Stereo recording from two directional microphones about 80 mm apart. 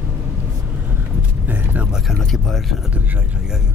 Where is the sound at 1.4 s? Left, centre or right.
Right.